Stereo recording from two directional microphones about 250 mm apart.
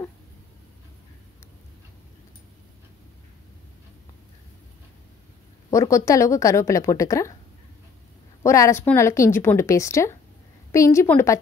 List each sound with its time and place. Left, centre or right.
5.7 s a woman's voice: centre
8.4 s a woman's voice: centre